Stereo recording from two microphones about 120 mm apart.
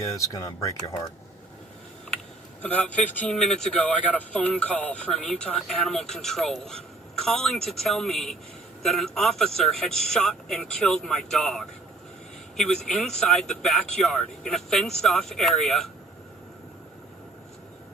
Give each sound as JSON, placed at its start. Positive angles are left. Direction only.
{"t": 0.0, "sound": "speech", "side_deg": 30}
{"t": 2.6, "sound": "speech", "side_deg": 10}